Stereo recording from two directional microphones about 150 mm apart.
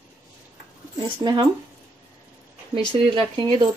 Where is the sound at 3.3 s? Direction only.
30° right (ahead or behind).